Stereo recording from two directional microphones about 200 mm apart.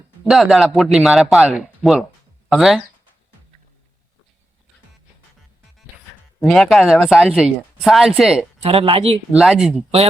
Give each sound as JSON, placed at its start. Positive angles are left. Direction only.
{"t": 0.3, "sound": "speech", "side_deg": 0}
{"t": 6.4, "sound": "speech", "side_deg": 0}
{"t": 8.6, "sound": "speech", "side_deg": -30}
{"t": 9.3, "sound": "speech", "side_deg": 0}